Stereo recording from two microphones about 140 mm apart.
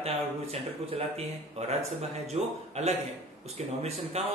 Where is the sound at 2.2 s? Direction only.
50° right (ahead or behind).